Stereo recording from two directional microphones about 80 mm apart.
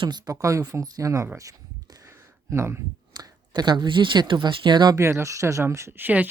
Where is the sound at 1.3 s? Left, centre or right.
Right.